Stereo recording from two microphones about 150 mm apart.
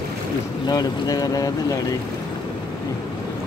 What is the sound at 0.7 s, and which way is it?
Speech, 25° left (ahead or behind).